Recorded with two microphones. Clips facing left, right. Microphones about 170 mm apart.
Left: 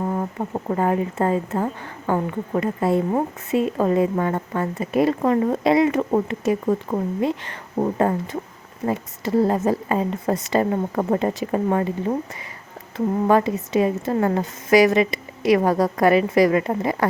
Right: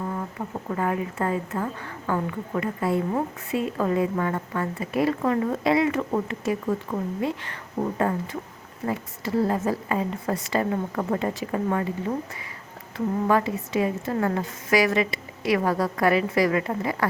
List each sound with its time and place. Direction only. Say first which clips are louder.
0.0 s a woman's voice: left 6 dB; 35° left (ahead or behind)
6.0 s speech: left 5 dB; 35° left (ahead or behind)
6.2 s a woman's voice: left 5 dB; 20° left (ahead or behind)
7.8 s a woman's voice: left 4 dB; 30° left (ahead or behind)
13.2 s a woman's voice: left 5 dB; 25° left (ahead or behind)